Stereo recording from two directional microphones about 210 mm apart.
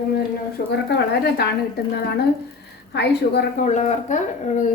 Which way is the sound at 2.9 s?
55° left (ahead or behind).